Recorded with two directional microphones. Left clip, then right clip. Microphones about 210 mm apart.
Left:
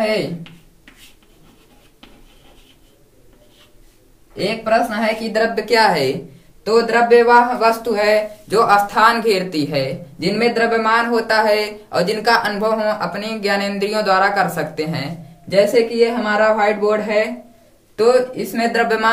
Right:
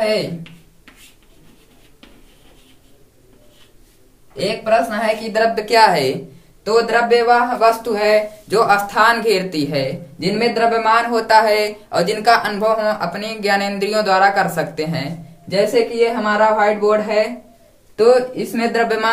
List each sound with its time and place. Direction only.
0.0 s speech: 10° right (ahead or behind)
4.4 s a man's voice: 15° right (ahead or behind)
17.9 s speech: centre (ahead or behind)